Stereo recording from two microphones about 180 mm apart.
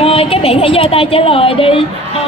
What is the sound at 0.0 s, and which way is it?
A woman's voice, 30° left (ahead or behind).